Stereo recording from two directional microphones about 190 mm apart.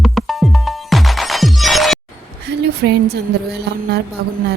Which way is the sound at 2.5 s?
65° right (ahead or behind).